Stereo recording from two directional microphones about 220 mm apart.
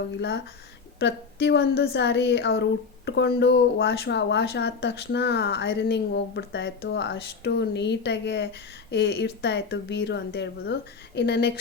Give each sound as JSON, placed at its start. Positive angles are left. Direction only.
{"t": 0.2, "sound": "speech", "side_deg": 50}